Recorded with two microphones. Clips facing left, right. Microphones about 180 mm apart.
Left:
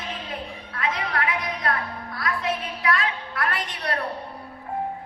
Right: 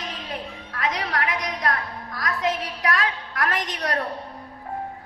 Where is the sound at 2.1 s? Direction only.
40° right (ahead or behind).